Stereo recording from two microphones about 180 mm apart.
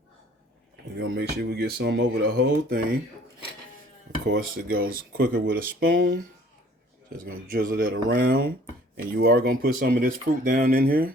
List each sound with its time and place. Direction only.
0.9 s speech: 65° right (ahead or behind)
4.3 s speech: 55° right (ahead or behind); by 6.0 s 80° right
6.0 s speech: 55° right (ahead or behind)
7.5 s speech: 55° right (ahead or behind)
9.1 s speech: 85° right
9.5 s speech: 55° right (ahead or behind)